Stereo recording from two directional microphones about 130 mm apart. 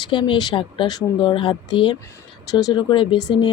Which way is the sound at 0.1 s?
40° left (ahead or behind).